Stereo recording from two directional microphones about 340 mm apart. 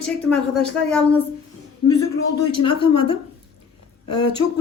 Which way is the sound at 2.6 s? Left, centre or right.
Centre.